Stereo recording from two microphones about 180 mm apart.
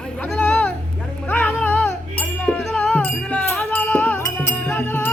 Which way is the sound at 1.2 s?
10° left (ahead or behind).